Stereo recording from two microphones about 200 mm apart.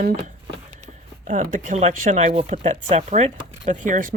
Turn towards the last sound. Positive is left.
turn(degrees=-40)  # may be behind; listen again after turning